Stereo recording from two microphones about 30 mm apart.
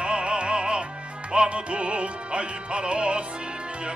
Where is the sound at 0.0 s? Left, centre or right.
Right.